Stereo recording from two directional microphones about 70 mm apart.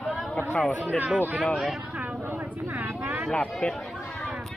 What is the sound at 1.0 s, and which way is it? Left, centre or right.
Speech, right.